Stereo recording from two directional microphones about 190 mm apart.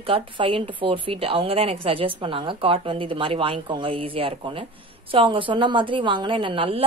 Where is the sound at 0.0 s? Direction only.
30° right (ahead or behind).